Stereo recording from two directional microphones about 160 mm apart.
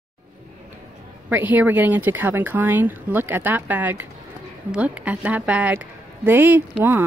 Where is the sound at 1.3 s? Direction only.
10° right (ahead or behind).